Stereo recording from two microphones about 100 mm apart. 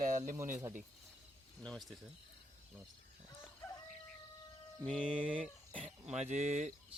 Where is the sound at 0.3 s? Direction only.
25° right (ahead or behind).